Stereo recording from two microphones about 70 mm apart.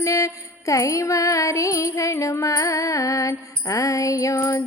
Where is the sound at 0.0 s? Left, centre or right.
Left.